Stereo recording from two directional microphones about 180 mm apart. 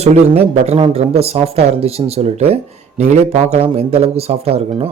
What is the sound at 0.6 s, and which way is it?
A man's voice, 35° right (ahead or behind).